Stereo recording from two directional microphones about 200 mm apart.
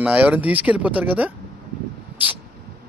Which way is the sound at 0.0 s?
10° right (ahead or behind).